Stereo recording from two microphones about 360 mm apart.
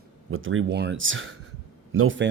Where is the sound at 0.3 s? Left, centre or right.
Right.